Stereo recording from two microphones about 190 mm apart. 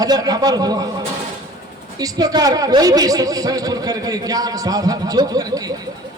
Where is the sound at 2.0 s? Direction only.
20° right (ahead or behind).